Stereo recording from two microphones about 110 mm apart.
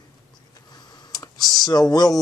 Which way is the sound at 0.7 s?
40° left (ahead or behind).